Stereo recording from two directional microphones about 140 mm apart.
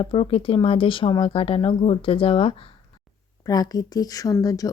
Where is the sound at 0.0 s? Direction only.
40° left (ahead or behind).